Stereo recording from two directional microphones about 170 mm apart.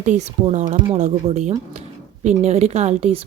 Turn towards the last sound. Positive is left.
turn(degrees=-35)  # may be behind; listen again after turning